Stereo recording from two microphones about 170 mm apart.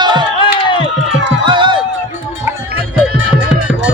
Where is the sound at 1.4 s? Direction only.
30° right (ahead or behind).